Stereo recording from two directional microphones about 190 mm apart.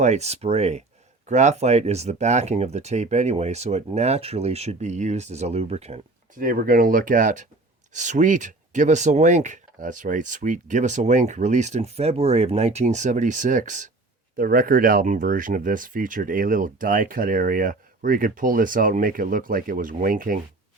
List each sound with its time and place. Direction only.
0.0 s speech: 35° right (ahead or behind)
6.4 s speech: 50° right (ahead or behind)